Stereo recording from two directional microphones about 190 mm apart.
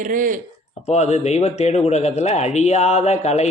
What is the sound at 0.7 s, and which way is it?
A man's voice, 35° left (ahead or behind).